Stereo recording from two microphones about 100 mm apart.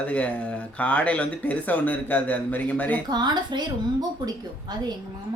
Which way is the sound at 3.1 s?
45° right (ahead or behind).